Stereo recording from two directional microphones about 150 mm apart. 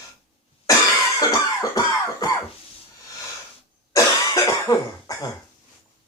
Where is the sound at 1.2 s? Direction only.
20° left (ahead or behind).